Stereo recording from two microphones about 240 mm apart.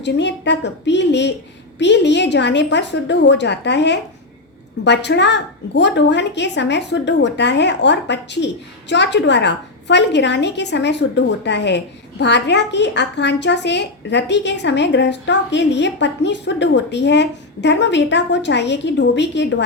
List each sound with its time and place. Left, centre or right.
0.0 s a woman's voice: left